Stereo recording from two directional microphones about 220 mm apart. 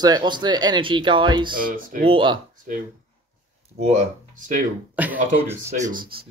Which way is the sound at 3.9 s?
35° right (ahead or behind).